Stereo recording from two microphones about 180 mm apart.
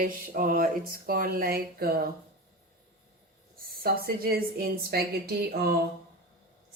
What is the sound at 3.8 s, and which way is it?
Speech, 55° right (ahead or behind).